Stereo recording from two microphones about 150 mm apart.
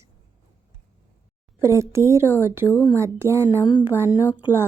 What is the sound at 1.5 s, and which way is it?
A woman's voice, 20° right (ahead or behind).